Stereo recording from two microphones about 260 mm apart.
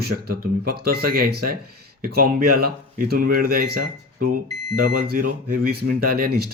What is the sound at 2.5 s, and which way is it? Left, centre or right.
Speech, right.